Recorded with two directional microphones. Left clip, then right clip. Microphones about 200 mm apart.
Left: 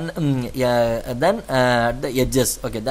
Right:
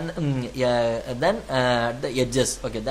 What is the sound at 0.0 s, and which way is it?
Speech, 40° left (ahead or behind).